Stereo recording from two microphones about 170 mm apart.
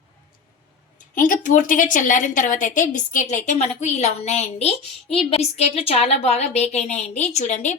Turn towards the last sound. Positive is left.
turn(degrees=45)  # may be behind; listen again after turning